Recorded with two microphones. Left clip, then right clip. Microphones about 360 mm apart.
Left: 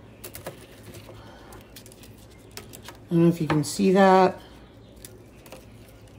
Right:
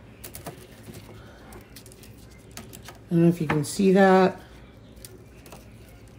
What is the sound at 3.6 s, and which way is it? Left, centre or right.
Speech, centre.